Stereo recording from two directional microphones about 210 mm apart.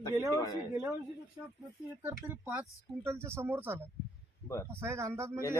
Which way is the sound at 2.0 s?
10° right (ahead or behind).